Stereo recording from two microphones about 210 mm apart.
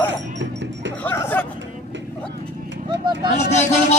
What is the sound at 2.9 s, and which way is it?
Speech, 20° right (ahead or behind).